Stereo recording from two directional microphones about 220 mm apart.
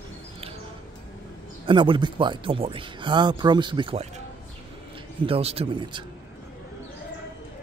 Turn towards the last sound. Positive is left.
turn(degrees=-20)  # may be behind; listen again after turning